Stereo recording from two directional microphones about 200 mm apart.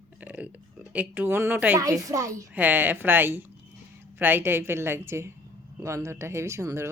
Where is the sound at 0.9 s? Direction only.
10° right (ahead or behind).